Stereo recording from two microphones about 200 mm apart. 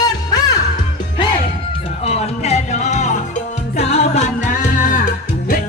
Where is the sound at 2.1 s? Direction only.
30° left (ahead or behind).